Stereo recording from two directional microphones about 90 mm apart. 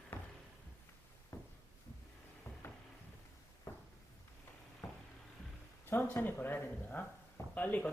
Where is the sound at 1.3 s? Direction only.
35° left (ahead or behind).